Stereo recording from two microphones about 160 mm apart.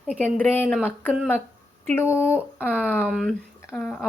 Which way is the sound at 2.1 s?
15° left (ahead or behind).